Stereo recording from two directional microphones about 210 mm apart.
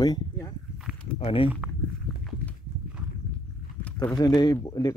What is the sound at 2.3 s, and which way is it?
Walk, centre (ahead or behind).